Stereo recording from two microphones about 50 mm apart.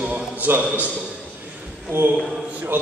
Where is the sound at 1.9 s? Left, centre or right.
Right.